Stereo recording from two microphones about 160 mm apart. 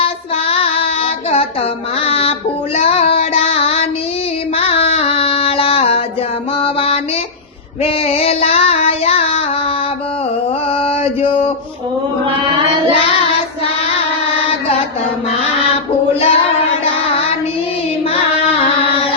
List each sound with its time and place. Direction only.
0.0 s child singing: 35° left (ahead or behind)
2.0 s music: 35° left (ahead or behind)
2.7 s child singing: 40° left (ahead or behind)
6.6 s mantra: 35° left (ahead or behind)
7.8 s female singing: 35° left (ahead or behind)
10.8 s mantra: 35° left (ahead or behind)
12.9 s child singing: 35° left (ahead or behind)
14.3 s mantra: 35° left (ahead or behind)
16.2 s child singing: 35° left (ahead or behind)